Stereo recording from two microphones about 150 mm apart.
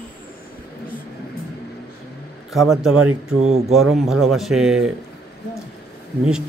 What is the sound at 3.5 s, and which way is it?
Speech, 45° right (ahead or behind).